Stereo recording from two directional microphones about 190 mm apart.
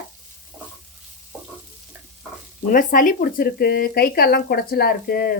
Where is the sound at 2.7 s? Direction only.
45° left (ahead or behind).